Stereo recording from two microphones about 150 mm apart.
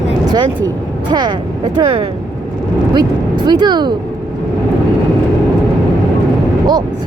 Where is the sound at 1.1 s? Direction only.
30° right (ahead or behind).